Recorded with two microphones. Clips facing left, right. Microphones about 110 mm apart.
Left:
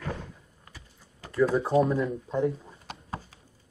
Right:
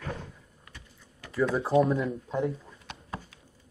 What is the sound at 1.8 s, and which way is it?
Speech, centre (ahead or behind).